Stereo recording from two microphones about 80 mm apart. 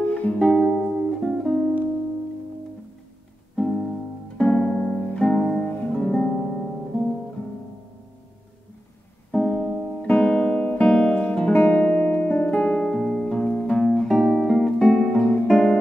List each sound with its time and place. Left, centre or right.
0.0 s music: centre
0.4 s music: centre
3.5 s music: centre
5.1 s music: centre
5.6 s music: left
5.9 s music: centre
6.3 s music: centre
9.3 s music: centre
10.7 s guitar: centre
13.0 s music: centre
15.4 s guitar: centre